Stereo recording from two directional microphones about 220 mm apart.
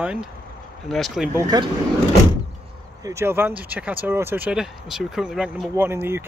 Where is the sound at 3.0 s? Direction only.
10° right (ahead or behind).